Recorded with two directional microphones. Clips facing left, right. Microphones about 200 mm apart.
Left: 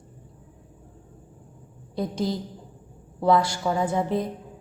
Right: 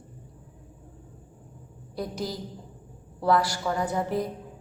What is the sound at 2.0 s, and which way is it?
A woman's voice, 25° left (ahead or behind).